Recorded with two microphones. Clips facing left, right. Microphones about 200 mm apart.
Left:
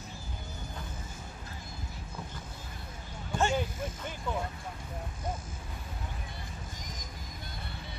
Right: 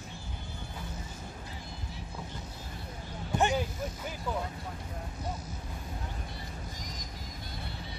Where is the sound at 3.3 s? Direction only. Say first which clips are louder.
Right 1 dB; 15° right (ahead or behind).